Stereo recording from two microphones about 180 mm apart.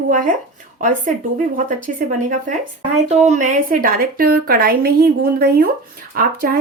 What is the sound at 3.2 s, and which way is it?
A woman's voice, 40° right (ahead or behind).